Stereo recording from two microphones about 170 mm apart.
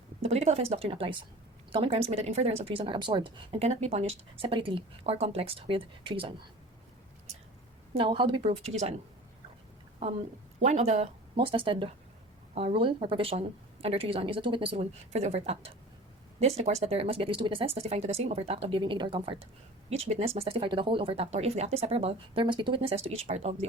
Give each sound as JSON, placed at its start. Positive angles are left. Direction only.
{"t": 0.2, "sound": "a woman's voice", "side_deg": -40}
{"t": 7.9, "sound": "a woman's voice", "side_deg": -30}
{"t": 10.6, "sound": "a woman's voice", "side_deg": -40}